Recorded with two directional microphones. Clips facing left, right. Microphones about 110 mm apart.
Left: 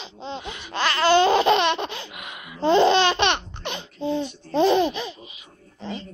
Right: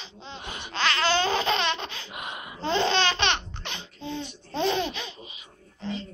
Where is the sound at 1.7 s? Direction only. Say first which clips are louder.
Left 7 dB; 15° left (ahead or behind).